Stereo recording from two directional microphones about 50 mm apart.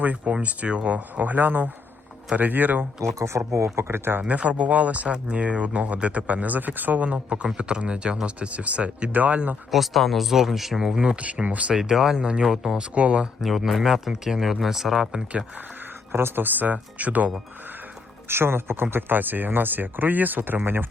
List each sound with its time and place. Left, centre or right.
0.0 s speech: right
3.2 s speech: right
4.2 s speech: right
9.7 s speech: centre; by 11.7 s right
11.7 s speech: centre
12.9 s speech: right
13.4 s speech: centre
15.1 s speech: centre
16.1 s speech: right
18.3 s speech: right